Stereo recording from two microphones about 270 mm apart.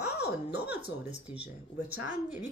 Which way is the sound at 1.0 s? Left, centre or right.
Centre.